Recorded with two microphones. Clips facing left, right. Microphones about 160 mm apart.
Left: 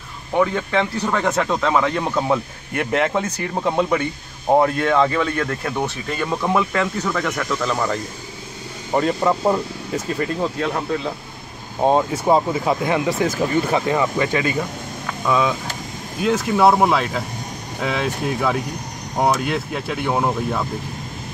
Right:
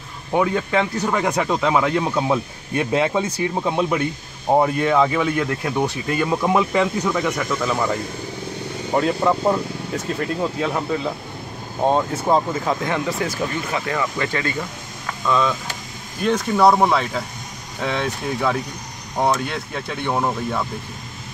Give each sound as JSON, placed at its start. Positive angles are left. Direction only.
{"t": 0.4, "sound": "speech", "side_deg": -5}
{"t": 8.9, "sound": "speech", "side_deg": 0}
{"t": 11.8, "sound": "speech", "side_deg": 10}
{"t": 13.7, "sound": "speech", "side_deg": 30}
{"t": 13.9, "sound": "speech", "side_deg": 15}